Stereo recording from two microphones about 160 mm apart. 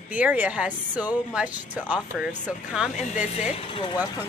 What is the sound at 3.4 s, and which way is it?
Speech, 40° left (ahead or behind).